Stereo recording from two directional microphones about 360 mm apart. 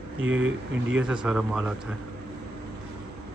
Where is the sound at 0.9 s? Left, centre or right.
Centre.